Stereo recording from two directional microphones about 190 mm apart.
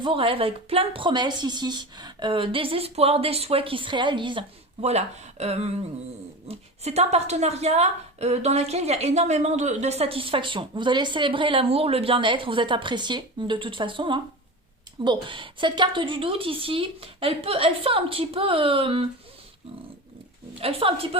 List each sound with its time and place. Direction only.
0.0 s a woman's voice: 25° right (ahead or behind)
20.6 s a woman's voice: 30° right (ahead or behind)